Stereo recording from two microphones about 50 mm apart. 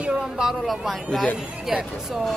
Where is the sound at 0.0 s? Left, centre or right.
Centre.